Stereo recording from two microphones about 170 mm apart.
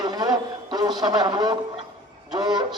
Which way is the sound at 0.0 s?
25° right (ahead or behind).